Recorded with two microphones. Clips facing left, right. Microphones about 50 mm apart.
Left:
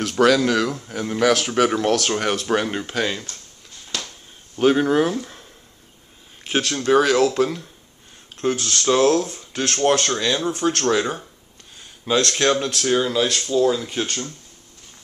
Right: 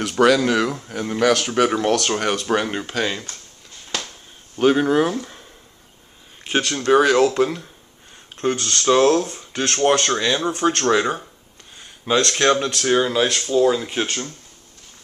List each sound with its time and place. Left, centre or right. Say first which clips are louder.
0.0 s speech: right 1 dB; centre
3.9 s a sound: right 2 dB; right
4.6 s speech: right 1 dB; centre; by 14.2 s right